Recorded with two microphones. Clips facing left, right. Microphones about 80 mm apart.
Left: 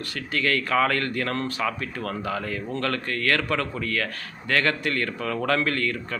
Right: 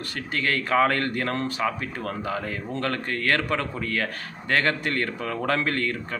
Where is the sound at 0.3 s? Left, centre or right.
Right.